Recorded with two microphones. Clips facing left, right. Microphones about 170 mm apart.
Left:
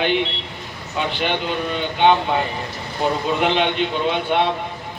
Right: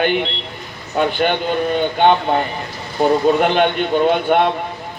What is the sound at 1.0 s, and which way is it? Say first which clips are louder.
A man's voice: right 6 dB; 50° right (ahead or behind).